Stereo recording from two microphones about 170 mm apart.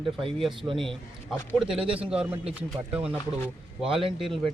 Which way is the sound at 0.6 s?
30° right (ahead or behind).